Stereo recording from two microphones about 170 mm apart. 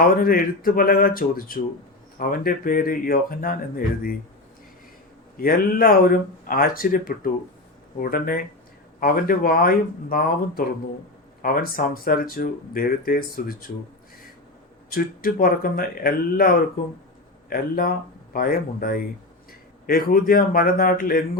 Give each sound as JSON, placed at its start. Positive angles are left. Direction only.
{"t": 0.0, "sound": "speech", "side_deg": 60}
{"t": 5.4, "sound": "speech", "side_deg": 60}
{"t": 14.8, "sound": "speech", "side_deg": 60}